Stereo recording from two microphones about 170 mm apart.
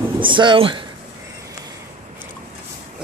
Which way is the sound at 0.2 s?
30° right (ahead or behind).